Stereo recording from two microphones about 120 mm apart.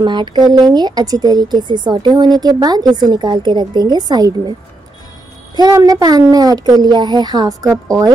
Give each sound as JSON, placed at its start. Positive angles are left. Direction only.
{"t": 0.0, "sound": "speech", "side_deg": -40}
{"t": 5.6, "sound": "speech", "side_deg": -30}